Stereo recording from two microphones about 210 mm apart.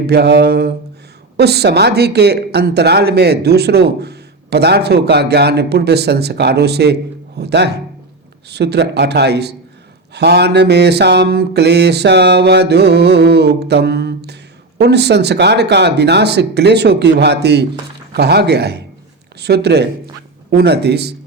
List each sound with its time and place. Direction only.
0.1 s a man's voice: 55° right (ahead or behind)